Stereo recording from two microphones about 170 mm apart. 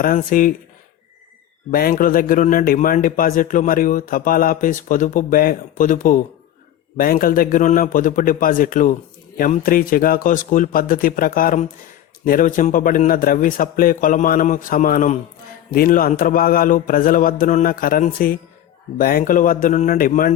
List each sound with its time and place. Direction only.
0.0 s speech: 55° left (ahead or behind)
1.7 s a man's voice: 60° left (ahead or behind)